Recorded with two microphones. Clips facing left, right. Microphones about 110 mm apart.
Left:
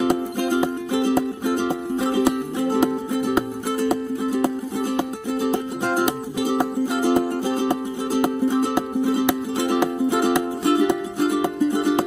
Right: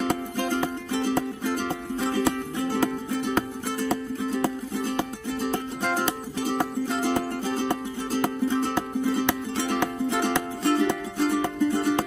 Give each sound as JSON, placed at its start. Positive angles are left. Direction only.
{"t": 0.0, "sound": "music", "side_deg": 15}
{"t": 4.8, "sound": "music", "side_deg": 15}